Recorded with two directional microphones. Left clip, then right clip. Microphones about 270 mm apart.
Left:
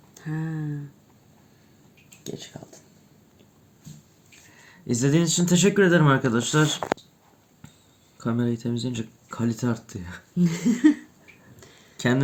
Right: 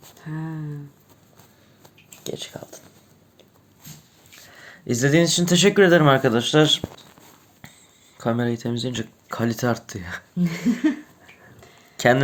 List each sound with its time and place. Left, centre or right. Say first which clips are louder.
0.2 s a sound: left 1 dB; left
2.2 s speech: right 6 dB; centre
4.6 s speech: right 3 dB; centre
8.2 s speech: right 4 dB; centre
10.3 s a sound: even; left
11.9 s speech: right 7 dB; centre